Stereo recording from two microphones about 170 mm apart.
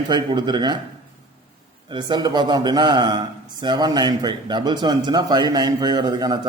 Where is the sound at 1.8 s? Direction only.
25° right (ahead or behind).